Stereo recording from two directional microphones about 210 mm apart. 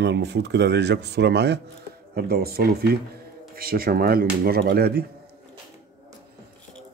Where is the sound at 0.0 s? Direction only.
55° right (ahead or behind).